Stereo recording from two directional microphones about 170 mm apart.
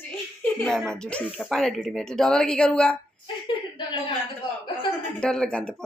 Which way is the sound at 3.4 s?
30° left (ahead or behind).